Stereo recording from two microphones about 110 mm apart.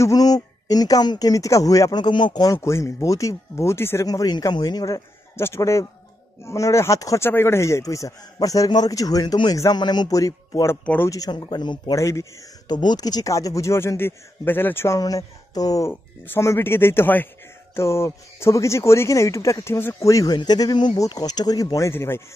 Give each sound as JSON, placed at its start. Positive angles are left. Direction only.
{"t": 0.0, "sound": "a man's voice", "side_deg": 35}
{"t": 2.5, "sound": "speech", "side_deg": 25}
{"t": 4.1, "sound": "a man's voice", "side_deg": 35}
{"t": 11.9, "sound": "speech", "side_deg": 30}
{"t": 12.6, "sound": "speech", "side_deg": 40}
{"t": 15.0, "sound": "a man's voice", "side_deg": 35}
{"t": 15.9, "sound": "a man's voice", "side_deg": 20}
{"t": 21.7, "sound": "speech", "side_deg": 25}